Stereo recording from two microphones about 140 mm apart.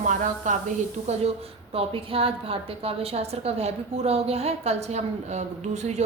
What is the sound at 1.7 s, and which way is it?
A woman's voice, 40° right (ahead or behind).